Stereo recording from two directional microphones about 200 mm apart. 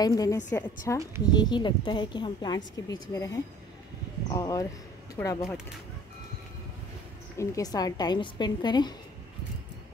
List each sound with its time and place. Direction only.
0.0 s a woman's voice: 20° left (ahead or behind)
4.4 s a woman's voice: 15° left (ahead or behind)
7.3 s a woman's voice: 15° left (ahead or behind)